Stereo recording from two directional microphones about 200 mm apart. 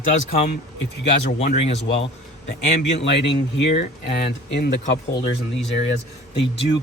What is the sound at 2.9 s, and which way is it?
Speech, 60° left (ahead or behind).